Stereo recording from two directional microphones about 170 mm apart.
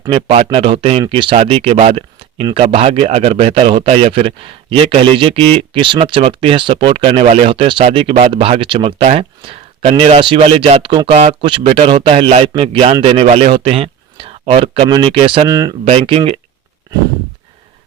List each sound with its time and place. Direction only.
0.0 s a man's voice: 35° right (ahead or behind)
15.4 s speech: 20° right (ahead or behind)
15.8 s speech: 35° right (ahead or behind)